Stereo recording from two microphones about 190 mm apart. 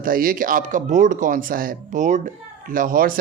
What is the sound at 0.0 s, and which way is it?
Speech, 50° right (ahead or behind).